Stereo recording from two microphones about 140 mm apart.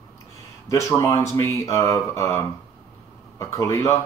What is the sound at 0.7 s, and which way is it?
Speech, 20° left (ahead or behind).